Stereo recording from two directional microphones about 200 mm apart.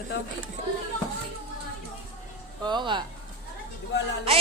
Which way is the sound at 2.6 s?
20° right (ahead or behind).